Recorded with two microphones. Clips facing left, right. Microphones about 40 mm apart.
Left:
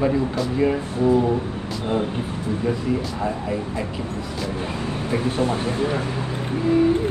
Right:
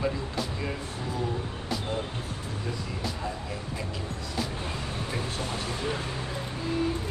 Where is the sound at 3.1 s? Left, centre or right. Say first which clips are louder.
Left 10 dB; left.